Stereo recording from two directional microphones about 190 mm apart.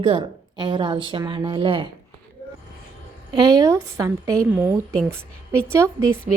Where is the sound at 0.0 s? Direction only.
25° right (ahead or behind).